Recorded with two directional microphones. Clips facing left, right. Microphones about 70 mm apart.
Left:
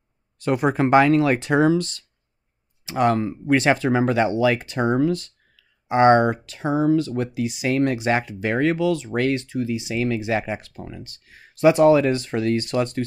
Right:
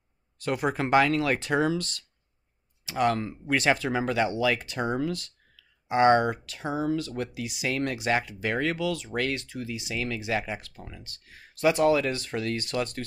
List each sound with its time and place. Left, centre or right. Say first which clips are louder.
0.4 s speech: left 7 dB; left